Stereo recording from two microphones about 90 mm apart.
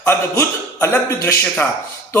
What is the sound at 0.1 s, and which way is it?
A man's voice, 30° left (ahead or behind).